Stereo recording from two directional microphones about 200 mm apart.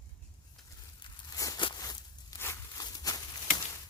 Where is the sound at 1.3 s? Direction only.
20° left (ahead or behind).